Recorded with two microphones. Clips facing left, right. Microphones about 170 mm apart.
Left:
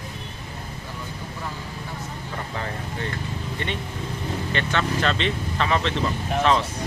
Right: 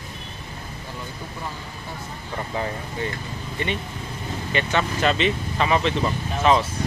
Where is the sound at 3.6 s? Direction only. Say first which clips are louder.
Right 4 dB; 5° right (ahead or behind).